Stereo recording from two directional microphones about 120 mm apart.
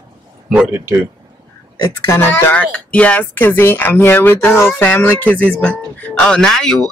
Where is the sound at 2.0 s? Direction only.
20° left (ahead or behind).